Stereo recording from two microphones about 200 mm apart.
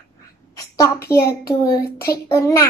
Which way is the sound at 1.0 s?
15° left (ahead or behind).